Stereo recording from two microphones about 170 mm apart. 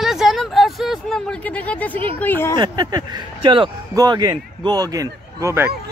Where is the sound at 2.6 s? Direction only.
25° right (ahead or behind).